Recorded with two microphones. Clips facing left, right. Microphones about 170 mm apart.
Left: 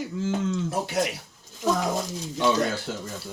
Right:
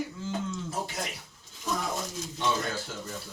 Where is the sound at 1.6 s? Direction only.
90° left.